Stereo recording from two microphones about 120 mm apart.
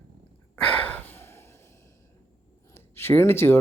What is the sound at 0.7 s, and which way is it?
Gasp, 15° left (ahead or behind).